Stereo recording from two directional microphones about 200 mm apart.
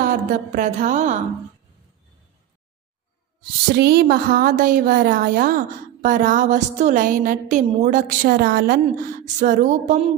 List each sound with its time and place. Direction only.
0.0 s a woman's voice: 45° right (ahead or behind)
3.8 s a woman's voice: 55° right (ahead or behind); by 10.1 s 35° right (ahead or behind)